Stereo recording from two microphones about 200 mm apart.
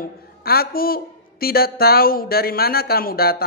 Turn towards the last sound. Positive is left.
turn(degrees=50)  # may be behind; listen again after turning